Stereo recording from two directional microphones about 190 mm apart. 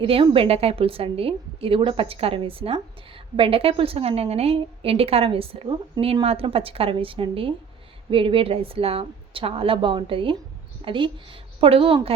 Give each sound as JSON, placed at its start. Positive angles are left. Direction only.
{"t": 0.0, "sound": "a woman's voice", "side_deg": -30}